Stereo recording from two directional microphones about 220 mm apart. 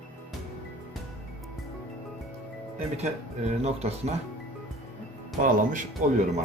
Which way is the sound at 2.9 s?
30° right (ahead or behind).